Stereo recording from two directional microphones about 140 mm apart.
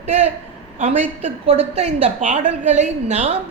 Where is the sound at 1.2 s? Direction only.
45° right (ahead or behind).